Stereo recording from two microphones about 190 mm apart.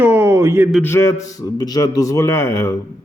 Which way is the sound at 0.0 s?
15° right (ahead or behind).